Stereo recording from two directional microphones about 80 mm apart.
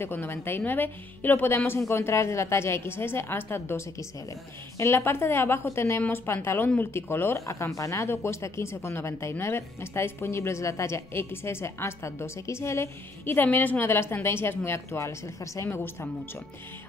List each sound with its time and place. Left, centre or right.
0.0 s a woman's voice: left